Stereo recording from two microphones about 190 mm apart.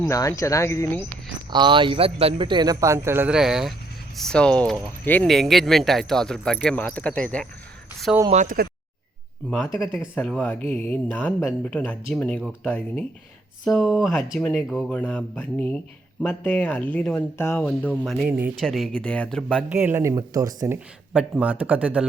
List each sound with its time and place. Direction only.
0.0 s speech: 15° left (ahead or behind)
1.5 s speech: 25° right (ahead or behind); by 7.4 s 5° left (ahead or behind)
8.3 s speech: 45° right (ahead or behind)
9.7 s speech: centre (ahead or behind)
19.5 s speech: 10° right (ahead or behind)
20.7 s speech: 5° right (ahead or behind)